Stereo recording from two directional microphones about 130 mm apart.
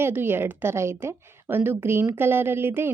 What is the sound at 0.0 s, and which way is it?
A woman's voice, 15° right (ahead or behind).